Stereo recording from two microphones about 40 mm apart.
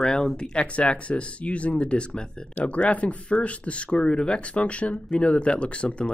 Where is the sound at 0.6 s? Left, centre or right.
Left.